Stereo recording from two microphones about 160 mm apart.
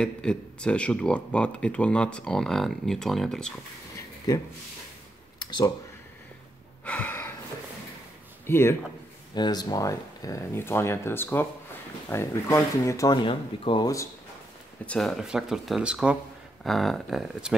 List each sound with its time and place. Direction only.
0.0 s speech: 5° left (ahead or behind)
5.4 s a sound: 25° left (ahead or behind)
6.8 s a sound: 10° left (ahead or behind)
8.5 s speech: 15° left (ahead or behind)
9.3 s speech: 25° left (ahead or behind)
14.9 s speech: centre (ahead or behind)